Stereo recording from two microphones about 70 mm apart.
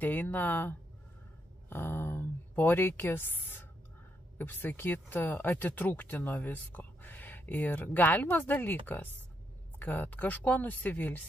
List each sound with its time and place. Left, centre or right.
0.0 s speech: left